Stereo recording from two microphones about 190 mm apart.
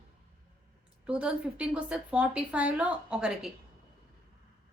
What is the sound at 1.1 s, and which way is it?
A woman's voice, 5° right (ahead or behind).